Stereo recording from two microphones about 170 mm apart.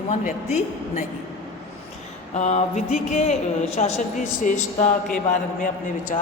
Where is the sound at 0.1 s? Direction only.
45° left (ahead or behind).